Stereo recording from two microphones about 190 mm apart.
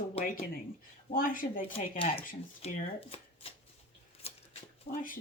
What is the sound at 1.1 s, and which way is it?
Speech, 45° left (ahead or behind).